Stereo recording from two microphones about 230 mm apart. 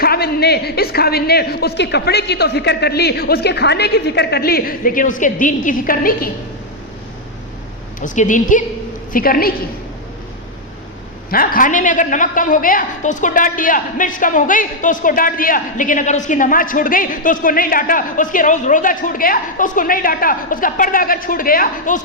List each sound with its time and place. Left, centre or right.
0.0 s a man's voice: left
8.0 s a woman's voice: left
11.3 s a woman's voice: left